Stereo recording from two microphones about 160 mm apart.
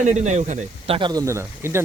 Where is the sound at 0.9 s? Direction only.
25° right (ahead or behind).